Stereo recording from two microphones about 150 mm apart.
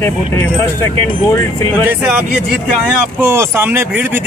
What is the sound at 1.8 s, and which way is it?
Speech, 10° right (ahead or behind).